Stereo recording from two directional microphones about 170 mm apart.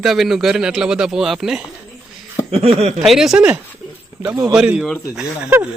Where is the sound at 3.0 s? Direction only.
Centre (ahead or behind).